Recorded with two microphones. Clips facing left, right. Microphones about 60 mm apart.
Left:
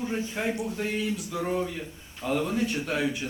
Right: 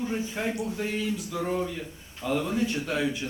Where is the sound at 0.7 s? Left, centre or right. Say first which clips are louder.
Even; centre.